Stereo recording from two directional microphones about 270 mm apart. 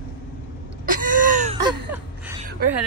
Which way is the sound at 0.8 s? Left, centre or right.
Right.